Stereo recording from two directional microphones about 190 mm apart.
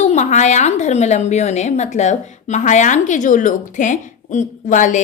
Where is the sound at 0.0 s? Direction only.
40° left (ahead or behind).